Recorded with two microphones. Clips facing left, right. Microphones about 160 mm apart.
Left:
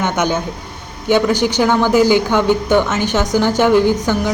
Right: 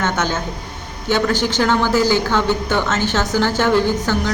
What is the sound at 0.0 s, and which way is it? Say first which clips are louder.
A man's voice: left 3 dB; 15° left (ahead or behind).